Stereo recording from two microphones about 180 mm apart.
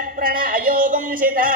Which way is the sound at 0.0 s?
50° right (ahead or behind).